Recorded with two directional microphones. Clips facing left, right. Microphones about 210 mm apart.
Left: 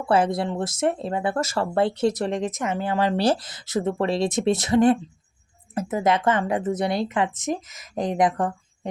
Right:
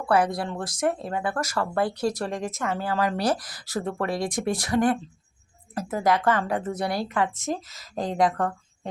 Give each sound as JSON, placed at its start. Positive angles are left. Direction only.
{"t": 0.1, "sound": "speech", "side_deg": 25}